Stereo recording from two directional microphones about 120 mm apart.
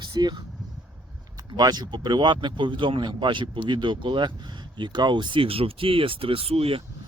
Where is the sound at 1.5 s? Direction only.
35° right (ahead or behind); by 6.8 s 55° right (ahead or behind).